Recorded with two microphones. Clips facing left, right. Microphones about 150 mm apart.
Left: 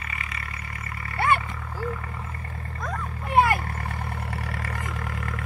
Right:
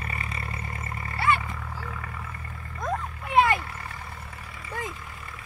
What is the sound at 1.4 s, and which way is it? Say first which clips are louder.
Vehicle: left 5 dB; centre (ahead or behind).